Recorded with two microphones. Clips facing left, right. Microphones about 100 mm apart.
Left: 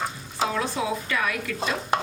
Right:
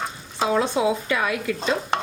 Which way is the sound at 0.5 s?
25° right (ahead or behind).